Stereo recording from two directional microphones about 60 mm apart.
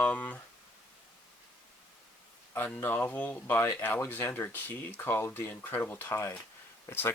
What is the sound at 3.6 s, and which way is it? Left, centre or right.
Speech, left.